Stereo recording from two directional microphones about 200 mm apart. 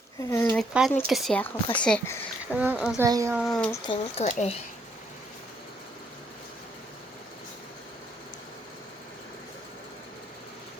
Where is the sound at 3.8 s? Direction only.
35° left (ahead or behind).